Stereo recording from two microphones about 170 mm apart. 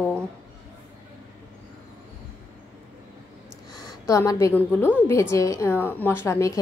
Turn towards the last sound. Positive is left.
turn(degrees=15)  # may be behind; listen again after turning